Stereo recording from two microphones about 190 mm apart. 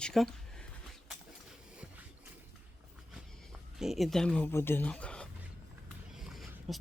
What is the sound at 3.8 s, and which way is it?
Speech, centre (ahead or behind).